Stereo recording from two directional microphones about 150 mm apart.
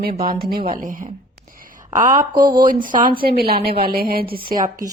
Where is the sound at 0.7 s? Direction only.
60° right (ahead or behind).